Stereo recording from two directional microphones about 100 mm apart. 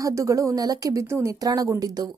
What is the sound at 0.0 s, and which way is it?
A woman's voice, 30° right (ahead or behind).